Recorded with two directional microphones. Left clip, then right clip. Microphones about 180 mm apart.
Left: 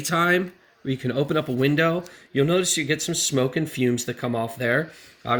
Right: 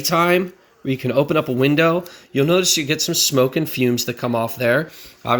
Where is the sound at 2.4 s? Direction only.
40° right (ahead or behind).